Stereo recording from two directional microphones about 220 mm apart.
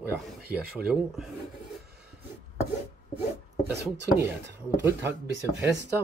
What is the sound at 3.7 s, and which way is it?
Speech, 50° right (ahead or behind).